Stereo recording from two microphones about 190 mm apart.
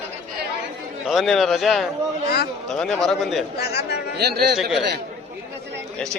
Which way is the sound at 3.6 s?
60° left (ahead or behind).